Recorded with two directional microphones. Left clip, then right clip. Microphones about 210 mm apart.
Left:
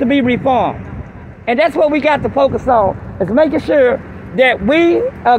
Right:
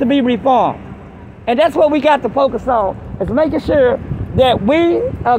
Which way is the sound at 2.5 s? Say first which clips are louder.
Left 3 dB; 20° left (ahead or behind).